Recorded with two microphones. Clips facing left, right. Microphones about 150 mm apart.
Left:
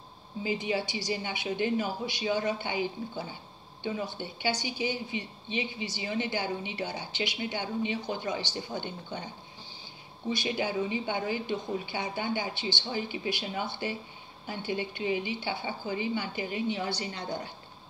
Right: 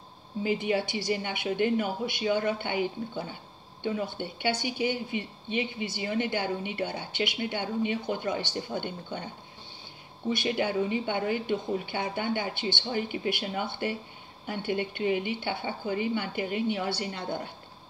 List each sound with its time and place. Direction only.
0.4 s speech: 55° right (ahead or behind)
10.3 s speech: 55° right (ahead or behind)